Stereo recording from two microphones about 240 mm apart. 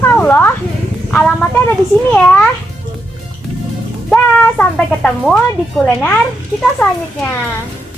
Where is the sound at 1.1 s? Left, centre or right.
Centre.